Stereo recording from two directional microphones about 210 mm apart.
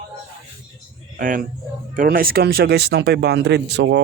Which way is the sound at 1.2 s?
40° right (ahead or behind).